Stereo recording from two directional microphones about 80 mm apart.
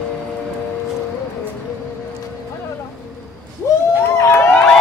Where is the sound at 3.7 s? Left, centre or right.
Left.